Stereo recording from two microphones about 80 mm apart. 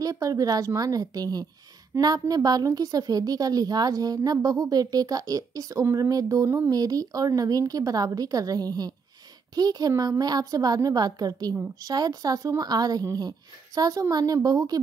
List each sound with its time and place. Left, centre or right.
0.0 s a woman's voice: right